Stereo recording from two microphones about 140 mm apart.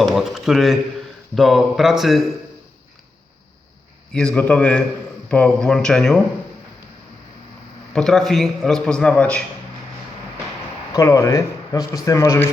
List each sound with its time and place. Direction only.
0.0 s a man's voice: centre (ahead or behind)
4.1 s a man's voice: 10° left (ahead or behind)
7.9 s a man's voice: 5° left (ahead or behind)
10.9 s speech: 25° left (ahead or behind)